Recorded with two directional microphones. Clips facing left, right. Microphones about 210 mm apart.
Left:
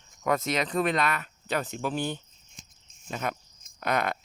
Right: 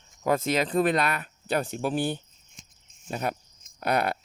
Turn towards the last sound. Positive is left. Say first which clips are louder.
# right 2 dB
turn(degrees=-35)  # may be behind; listen again after turning